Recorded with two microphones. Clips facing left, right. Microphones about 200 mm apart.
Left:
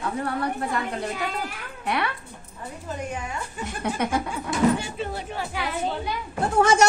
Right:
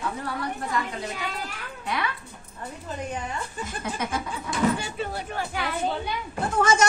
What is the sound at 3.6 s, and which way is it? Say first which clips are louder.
Speech: left 7 dB; 60° left (ahead or behind).